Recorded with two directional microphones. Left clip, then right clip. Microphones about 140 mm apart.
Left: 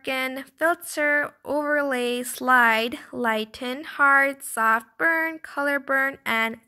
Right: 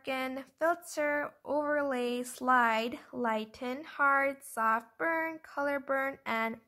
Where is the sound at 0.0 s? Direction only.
25° left (ahead or behind).